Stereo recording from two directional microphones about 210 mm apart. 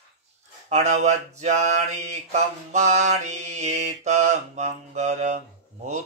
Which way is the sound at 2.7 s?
35° right (ahead or behind).